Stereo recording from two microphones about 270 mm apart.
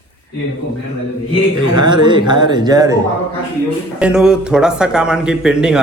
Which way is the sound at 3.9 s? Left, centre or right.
Centre.